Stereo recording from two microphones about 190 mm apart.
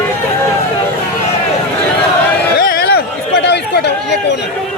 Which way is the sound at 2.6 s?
55° left (ahead or behind).